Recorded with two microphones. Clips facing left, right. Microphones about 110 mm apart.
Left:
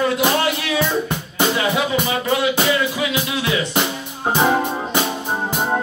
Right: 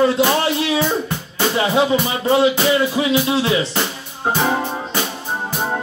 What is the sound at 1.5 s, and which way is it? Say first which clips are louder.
Music: right 3 dB; 30° right (ahead or behind).